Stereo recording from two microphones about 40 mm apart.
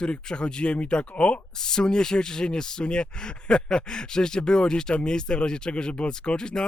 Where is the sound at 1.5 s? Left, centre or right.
Centre.